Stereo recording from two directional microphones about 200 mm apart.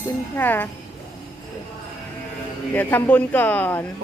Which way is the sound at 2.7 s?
10° left (ahead or behind).